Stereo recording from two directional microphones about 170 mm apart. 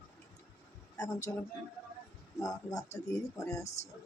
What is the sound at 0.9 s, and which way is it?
Speech, 20° left (ahead or behind).